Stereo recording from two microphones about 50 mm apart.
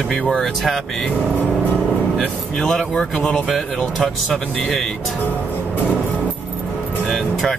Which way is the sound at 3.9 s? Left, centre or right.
Centre.